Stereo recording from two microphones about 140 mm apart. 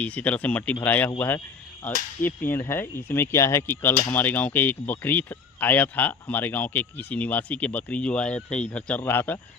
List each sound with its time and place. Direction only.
0.0 s speech: 10° left (ahead or behind)
2.2 s speech: 15° left (ahead or behind)